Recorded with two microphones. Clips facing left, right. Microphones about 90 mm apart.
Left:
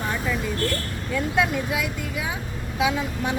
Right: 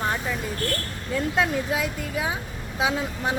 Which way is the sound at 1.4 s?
30° right (ahead or behind).